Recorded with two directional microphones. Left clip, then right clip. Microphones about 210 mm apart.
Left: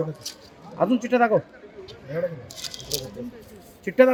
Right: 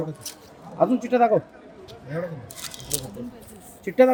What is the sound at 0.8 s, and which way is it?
Speech, 40° left (ahead or behind).